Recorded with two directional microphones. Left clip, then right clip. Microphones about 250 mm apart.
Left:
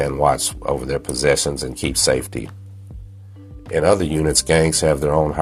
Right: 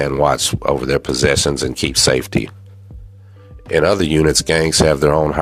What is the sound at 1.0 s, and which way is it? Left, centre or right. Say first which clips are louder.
Speech: right 2 dB; right.